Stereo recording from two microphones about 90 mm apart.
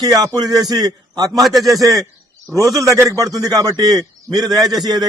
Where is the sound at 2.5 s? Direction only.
35° right (ahead or behind).